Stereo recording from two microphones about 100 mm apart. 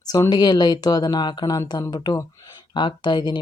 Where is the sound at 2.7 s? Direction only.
50° left (ahead or behind).